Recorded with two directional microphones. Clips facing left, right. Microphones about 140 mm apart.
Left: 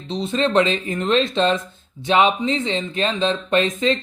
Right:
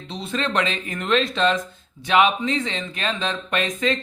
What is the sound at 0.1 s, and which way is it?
Speech, 25° left (ahead or behind).